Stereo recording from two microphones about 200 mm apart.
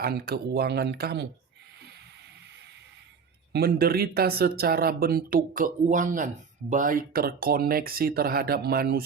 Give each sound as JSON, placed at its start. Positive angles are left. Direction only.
{"t": 0.0, "sound": "speech", "side_deg": -50}
{"t": 3.5, "sound": "speech", "side_deg": -50}